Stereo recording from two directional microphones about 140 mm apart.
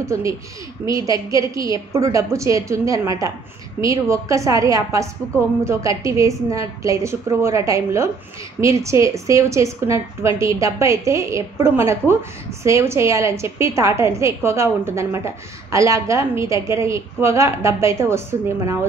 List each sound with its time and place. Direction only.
0.0 s a woman's voice: 20° right (ahead or behind)